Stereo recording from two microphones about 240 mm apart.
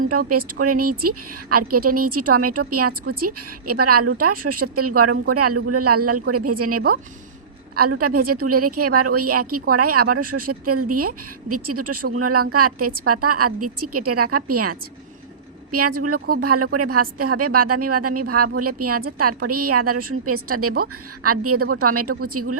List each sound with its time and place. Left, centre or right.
0.6 s a woman's voice: right